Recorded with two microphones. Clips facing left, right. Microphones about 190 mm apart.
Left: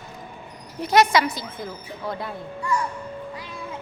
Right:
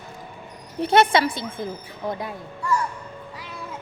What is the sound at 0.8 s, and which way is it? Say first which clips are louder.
Speech: right 1 dB; 30° right (ahead or behind).